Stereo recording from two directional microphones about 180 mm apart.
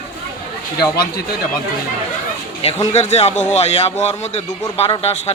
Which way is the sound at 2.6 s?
35° left (ahead or behind).